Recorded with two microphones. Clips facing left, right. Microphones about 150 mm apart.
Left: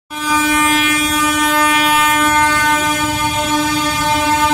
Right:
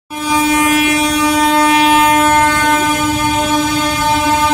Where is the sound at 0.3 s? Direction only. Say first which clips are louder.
Right 3 dB; 35° right (ahead or behind).